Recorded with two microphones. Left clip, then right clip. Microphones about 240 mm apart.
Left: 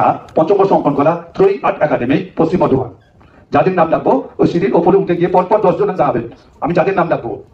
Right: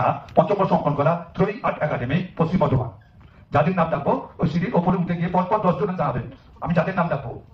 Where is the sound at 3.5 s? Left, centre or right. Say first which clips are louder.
Left 9 dB; left.